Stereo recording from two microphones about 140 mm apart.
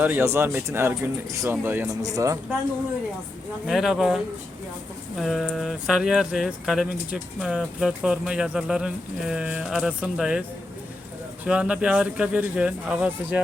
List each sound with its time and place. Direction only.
0.0 s speech: 15° right (ahead or behind)
3.7 s speech: centre (ahead or behind)
11.4 s speech: 5° right (ahead or behind)